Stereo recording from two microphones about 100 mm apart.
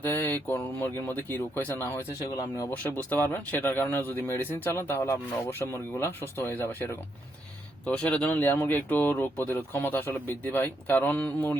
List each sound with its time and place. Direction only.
0.0 s speech: 20° left (ahead or behind)
2.2 s speech: 35° left (ahead or behind)
2.6 s speech: 20° left (ahead or behind)
7.9 s speech: 10° left (ahead or behind)